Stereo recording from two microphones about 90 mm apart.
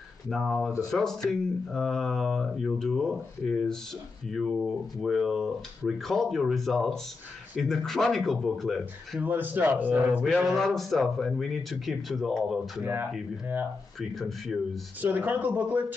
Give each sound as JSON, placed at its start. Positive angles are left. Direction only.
{"t": 0.3, "sound": "speech", "side_deg": 0}
{"t": 9.2, "sound": "a man's voice", "side_deg": -20}
{"t": 10.2, "sound": "speech", "side_deg": 0}
{"t": 13.9, "sound": "speech", "side_deg": 0}
{"t": 15.0, "sound": "a man's voice", "side_deg": -20}